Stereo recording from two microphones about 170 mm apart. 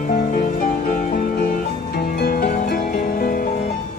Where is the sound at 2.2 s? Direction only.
60° left (ahead or behind).